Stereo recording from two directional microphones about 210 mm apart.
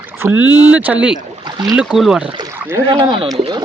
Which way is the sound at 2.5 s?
10° right (ahead or behind).